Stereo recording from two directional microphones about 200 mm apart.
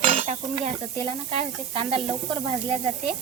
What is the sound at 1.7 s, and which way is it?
Speech, 30° right (ahead or behind).